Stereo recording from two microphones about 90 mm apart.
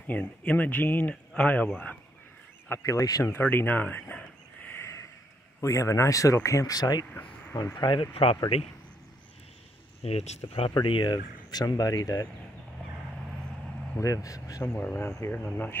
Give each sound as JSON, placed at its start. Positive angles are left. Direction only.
{"t": 0.0, "sound": "speech", "side_deg": 15}
{"t": 2.7, "sound": "speech", "side_deg": 35}
{"t": 3.3, "sound": "speech", "side_deg": 20}
{"t": 5.6, "sound": "speech", "side_deg": 35}
{"t": 8.1, "sound": "speech", "side_deg": 90}
{"t": 10.0, "sound": "speech", "side_deg": 90}
{"t": 10.7, "sound": "speech", "side_deg": 60}
{"t": 11.6, "sound": "speech", "side_deg": 45}
{"t": 13.9, "sound": "speech", "side_deg": 40}
{"t": 14.7, "sound": "speech", "side_deg": 20}